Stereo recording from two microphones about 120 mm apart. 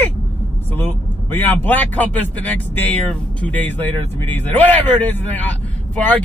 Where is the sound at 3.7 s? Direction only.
15° left (ahead or behind).